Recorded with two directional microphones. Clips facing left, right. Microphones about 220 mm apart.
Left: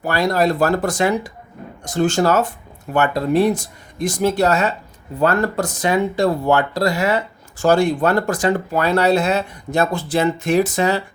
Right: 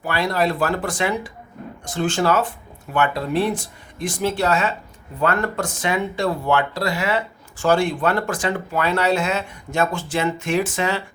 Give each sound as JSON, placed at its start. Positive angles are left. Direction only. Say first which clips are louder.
{"t": 0.0, "sound": "speech", "louder": "left 4 dB", "side_deg": 40}